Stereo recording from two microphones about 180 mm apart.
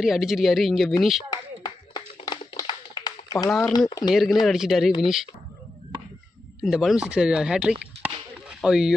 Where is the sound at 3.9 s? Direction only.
25° left (ahead or behind).